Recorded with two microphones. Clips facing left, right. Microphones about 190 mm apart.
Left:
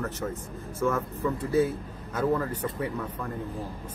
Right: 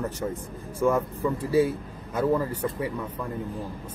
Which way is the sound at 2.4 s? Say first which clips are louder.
Right 2 dB; 10° right (ahead or behind).